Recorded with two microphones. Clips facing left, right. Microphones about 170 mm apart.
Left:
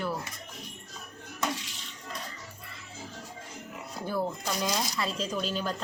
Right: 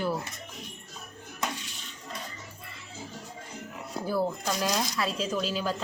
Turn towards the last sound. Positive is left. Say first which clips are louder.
# right 2 dB
turn(degrees=-5)  # may be behind; listen again after turning